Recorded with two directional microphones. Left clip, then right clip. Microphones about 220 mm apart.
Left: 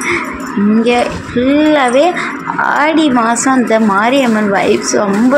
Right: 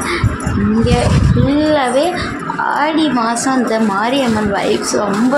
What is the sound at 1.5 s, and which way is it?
A child's voice, 20° left (ahead or behind).